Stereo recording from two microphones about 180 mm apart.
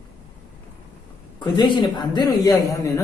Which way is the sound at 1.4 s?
25° left (ahead or behind).